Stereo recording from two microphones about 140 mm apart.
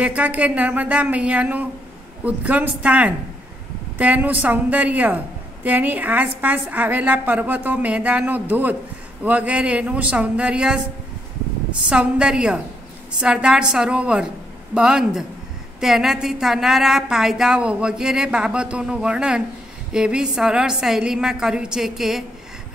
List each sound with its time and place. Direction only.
0.0 s a woman's voice: 10° right (ahead or behind)
11.9 s a woman's voice: 5° right (ahead or behind)